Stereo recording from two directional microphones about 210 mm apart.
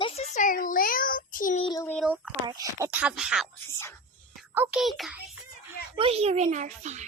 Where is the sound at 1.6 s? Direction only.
20° left (ahead or behind).